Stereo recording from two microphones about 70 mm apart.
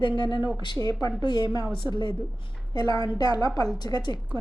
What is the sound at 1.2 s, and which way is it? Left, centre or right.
Speech, left.